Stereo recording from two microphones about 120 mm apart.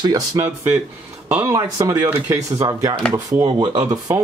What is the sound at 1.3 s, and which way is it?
Speech, 25° right (ahead or behind).